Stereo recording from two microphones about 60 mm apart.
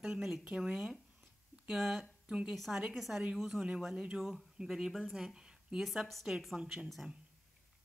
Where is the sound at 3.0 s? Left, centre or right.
Centre.